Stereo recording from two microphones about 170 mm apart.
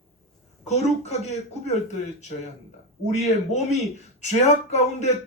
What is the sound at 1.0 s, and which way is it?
Speech, 40° left (ahead or behind).